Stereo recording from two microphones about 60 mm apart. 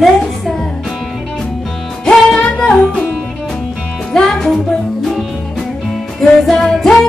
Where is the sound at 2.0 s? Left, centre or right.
Centre.